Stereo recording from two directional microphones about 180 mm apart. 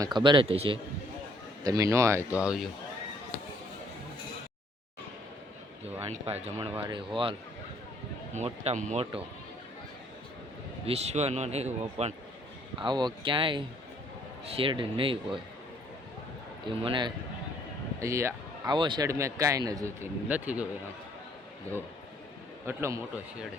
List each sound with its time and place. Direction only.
0.0 s speech: 25° right (ahead or behind)
1.6 s speech: 15° right (ahead or behind)
6.0 s speech: 35° right (ahead or behind)
8.3 s speech: 40° right (ahead or behind)
10.8 s speech: 35° right (ahead or behind)
12.8 s speech: 25° right (ahead or behind)
16.6 s speech: 25° right (ahead or behind)
18.0 s speech: 15° right (ahead or behind)
22.6 s speech: 15° right (ahead or behind)